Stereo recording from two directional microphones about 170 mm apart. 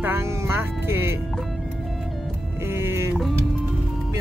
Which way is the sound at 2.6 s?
15° right (ahead or behind).